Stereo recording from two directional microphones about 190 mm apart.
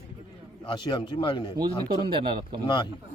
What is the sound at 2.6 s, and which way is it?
Speech, 25° left (ahead or behind).